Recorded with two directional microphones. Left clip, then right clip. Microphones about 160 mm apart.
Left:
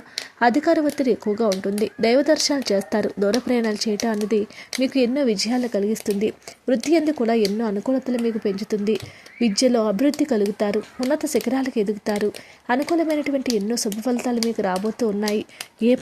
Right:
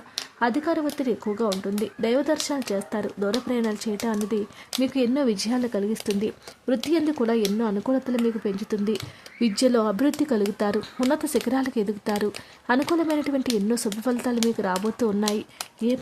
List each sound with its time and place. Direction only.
0.3 s speech: 20° left (ahead or behind)